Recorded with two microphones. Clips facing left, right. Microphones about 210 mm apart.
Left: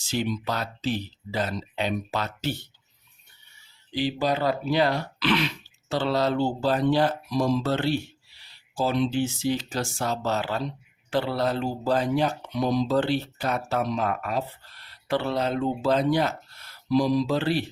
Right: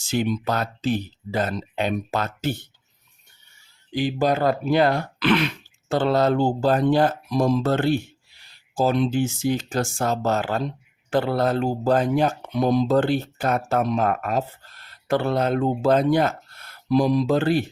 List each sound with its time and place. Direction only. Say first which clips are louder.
0.0 s speech: right 4 dB; 50° right (ahead or behind)
3.9 s speech: right 4 dB; 50° right (ahead or behind)